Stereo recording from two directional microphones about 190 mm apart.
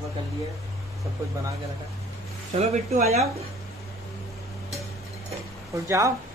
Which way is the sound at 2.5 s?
35° right (ahead or behind).